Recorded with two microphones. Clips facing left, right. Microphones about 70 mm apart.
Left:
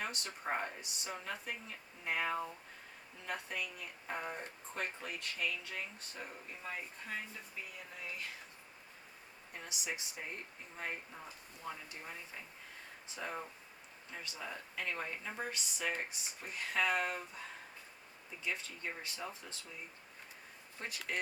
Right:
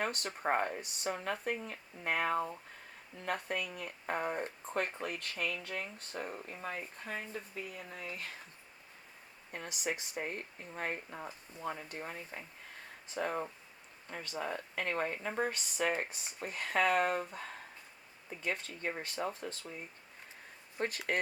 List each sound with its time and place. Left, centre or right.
0.0 s speech: right
7.9 s speech: right
9.5 s speech: right
20.7 s speech: right